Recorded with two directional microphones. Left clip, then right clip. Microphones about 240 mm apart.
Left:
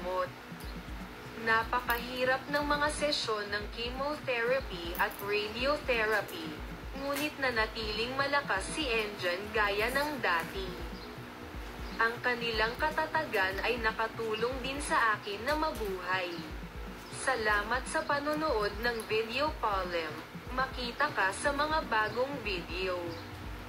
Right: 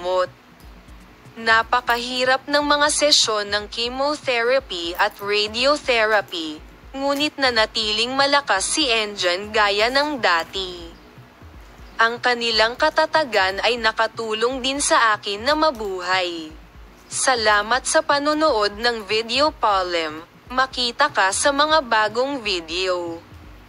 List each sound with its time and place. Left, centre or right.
1.4 s a woman's voice: right
12.0 s a woman's voice: right